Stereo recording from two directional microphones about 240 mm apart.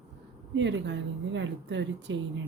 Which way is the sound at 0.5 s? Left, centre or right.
Right.